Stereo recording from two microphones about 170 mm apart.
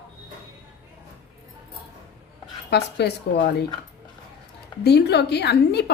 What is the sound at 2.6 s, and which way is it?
Speech, 80° left.